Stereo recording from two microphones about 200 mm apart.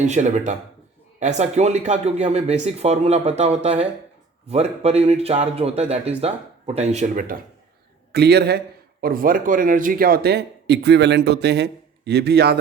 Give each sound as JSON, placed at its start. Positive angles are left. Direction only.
{"t": 0.0, "sound": "speech", "side_deg": -35}
{"t": 8.1, "sound": "a man's voice", "side_deg": -55}